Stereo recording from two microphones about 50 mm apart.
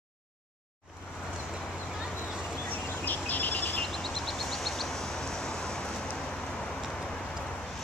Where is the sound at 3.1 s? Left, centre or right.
Left.